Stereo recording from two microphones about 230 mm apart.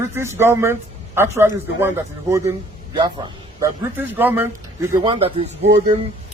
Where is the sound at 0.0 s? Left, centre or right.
Centre.